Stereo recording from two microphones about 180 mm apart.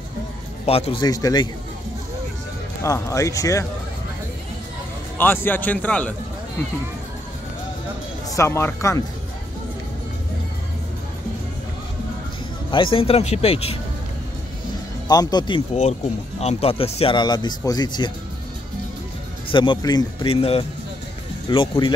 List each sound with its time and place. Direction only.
0.7 s a man's voice: 35° left (ahead or behind)
1.0 s speech: 20° left (ahead or behind)
2.8 s speech: 20° left (ahead or behind)
5.1 s speech: 10° left (ahead or behind)
8.4 s speech: 15° left (ahead or behind)
12.7 s a man's voice: 30° left (ahead or behind)
15.0 s speech: 20° left (ahead or behind)
15.7 s speech: 40° left (ahead or behind)
19.5 s speech: 25° left (ahead or behind)